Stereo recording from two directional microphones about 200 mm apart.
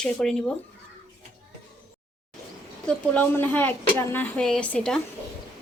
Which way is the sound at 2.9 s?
10° left (ahead or behind).